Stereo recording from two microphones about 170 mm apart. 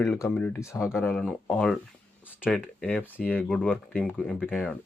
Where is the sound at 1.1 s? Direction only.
5° left (ahead or behind).